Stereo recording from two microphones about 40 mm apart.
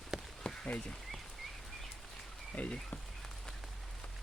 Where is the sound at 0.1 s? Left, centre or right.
Centre.